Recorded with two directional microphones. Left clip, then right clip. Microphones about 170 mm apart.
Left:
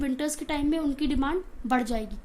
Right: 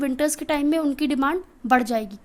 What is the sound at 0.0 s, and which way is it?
A woman's voice, 45° right (ahead or behind).